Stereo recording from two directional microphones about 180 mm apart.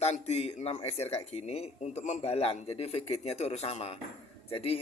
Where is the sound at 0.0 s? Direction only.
35° left (ahead or behind).